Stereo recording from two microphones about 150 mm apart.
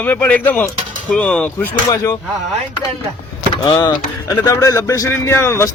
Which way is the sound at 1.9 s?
20° left (ahead or behind).